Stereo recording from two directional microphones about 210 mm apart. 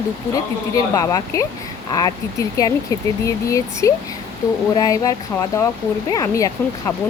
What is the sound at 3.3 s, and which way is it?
A woman's voice, 15° left (ahead or behind).